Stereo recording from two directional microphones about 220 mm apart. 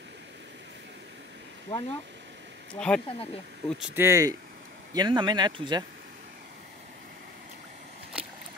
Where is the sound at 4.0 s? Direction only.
15° right (ahead or behind).